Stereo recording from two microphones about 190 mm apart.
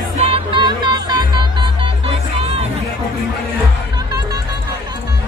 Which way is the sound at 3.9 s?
20° right (ahead or behind).